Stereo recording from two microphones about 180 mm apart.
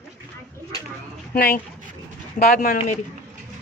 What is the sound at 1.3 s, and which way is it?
A woman's voice, 60° left (ahead or behind).